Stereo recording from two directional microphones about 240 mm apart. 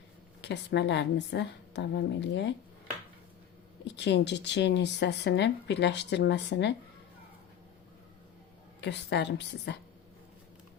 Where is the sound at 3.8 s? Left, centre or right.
Left.